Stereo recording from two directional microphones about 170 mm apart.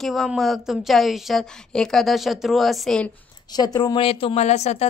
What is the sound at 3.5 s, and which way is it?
A woman's voice, 25° left (ahead or behind).